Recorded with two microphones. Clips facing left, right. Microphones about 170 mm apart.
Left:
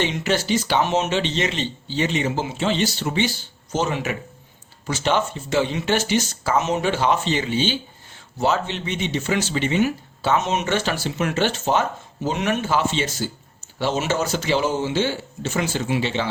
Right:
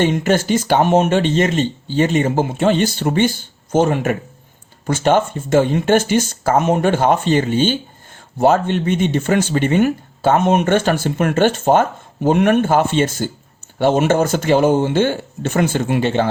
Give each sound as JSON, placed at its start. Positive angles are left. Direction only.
{"t": 0.0, "sound": "speech", "side_deg": -50}